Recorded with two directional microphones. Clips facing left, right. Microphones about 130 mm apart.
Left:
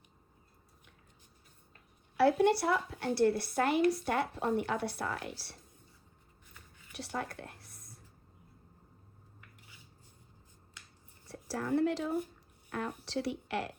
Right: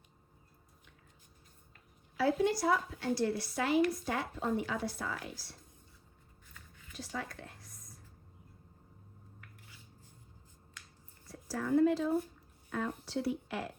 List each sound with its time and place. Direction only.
2.1 s a woman's voice: 65° left (ahead or behind)
6.9 s a sound: 60° left (ahead or behind)
11.3 s a woman's voice: 70° left (ahead or behind)
13.1 s speech: 80° left